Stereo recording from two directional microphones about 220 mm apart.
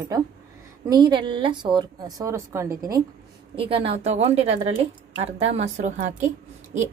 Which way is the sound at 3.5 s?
25° right (ahead or behind).